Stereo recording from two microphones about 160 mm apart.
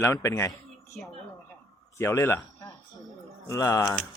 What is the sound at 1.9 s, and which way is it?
A man's voice, 15° left (ahead or behind).